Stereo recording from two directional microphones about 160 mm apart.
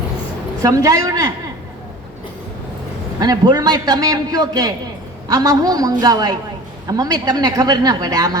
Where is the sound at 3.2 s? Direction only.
25° right (ahead or behind).